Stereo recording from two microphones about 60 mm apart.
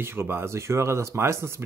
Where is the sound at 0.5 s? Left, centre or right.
Right.